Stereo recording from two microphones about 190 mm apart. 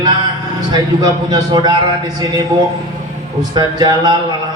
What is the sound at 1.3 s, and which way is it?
Speech, 20° right (ahead or behind).